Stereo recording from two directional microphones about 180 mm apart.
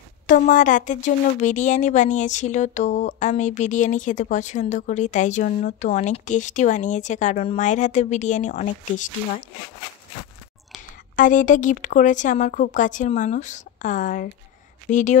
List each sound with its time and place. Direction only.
0.3 s a woman's voice: 45° left (ahead or behind)
11.1 s a woman's voice: 45° left (ahead or behind)